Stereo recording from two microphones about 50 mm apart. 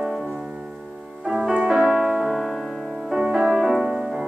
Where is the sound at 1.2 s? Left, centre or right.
Centre.